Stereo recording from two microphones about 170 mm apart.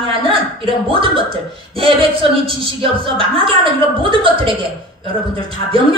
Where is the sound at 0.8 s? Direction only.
30° right (ahead or behind).